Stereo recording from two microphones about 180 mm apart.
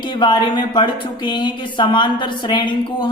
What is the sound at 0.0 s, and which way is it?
Speech, 25° left (ahead or behind).